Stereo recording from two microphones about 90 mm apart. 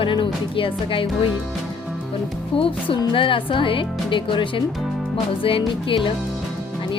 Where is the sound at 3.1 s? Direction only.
70° left (ahead or behind).